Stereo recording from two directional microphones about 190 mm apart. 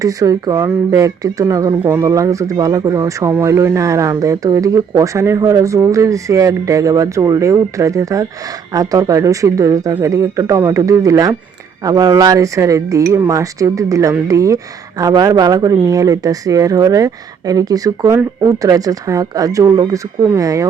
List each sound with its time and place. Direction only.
0.0 s speech: 20° right (ahead or behind)